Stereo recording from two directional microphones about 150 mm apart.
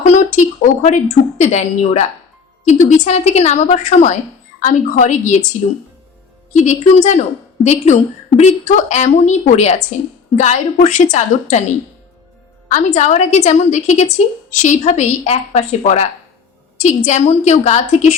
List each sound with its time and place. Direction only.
0.0 s a woman's voice: 55° left (ahead or behind)
6.5 s a woman's voice: 50° left (ahead or behind)